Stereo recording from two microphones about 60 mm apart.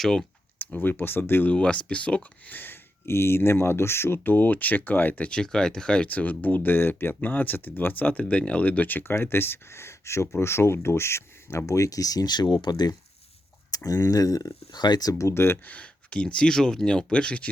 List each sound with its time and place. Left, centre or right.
0.0 s speech: centre
0.6 s speech: left
1.5 s speech: centre
2.5 s speech: left
13.7 s speech: left
15.3 s speech: left
15.6 s speech: left